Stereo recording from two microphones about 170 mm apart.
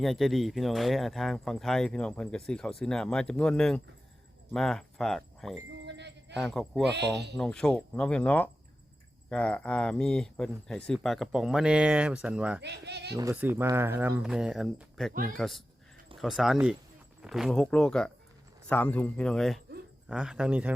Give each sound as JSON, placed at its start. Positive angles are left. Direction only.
{"t": 0.0, "sound": "speech", "side_deg": 0}
{"t": 5.8, "sound": "music", "side_deg": -90}
{"t": 6.3, "sound": "speech", "side_deg": 0}
{"t": 12.6, "sound": "speech", "side_deg": -80}
{"t": 13.3, "sound": "speech", "side_deg": -10}
{"t": 15.1, "sound": "speech", "side_deg": -55}
{"t": 15.4, "sound": "speech", "side_deg": 0}